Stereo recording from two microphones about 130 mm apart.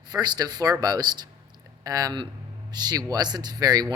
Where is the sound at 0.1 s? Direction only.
30° right (ahead or behind).